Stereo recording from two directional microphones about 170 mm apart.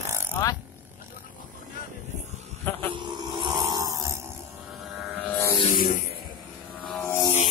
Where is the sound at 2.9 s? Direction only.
30° right (ahead or behind).